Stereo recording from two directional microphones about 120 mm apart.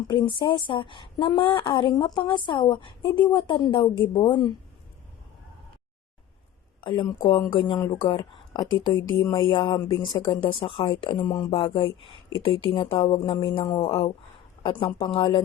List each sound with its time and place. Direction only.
0.1 s a woman's voice: 40° left (ahead or behind)
6.8 s speech: 45° left (ahead or behind)
8.7 s speech: 45° left (ahead or behind)
11.3 s a woman's voice: 35° left (ahead or behind)
11.5 s speech: 50° left (ahead or behind)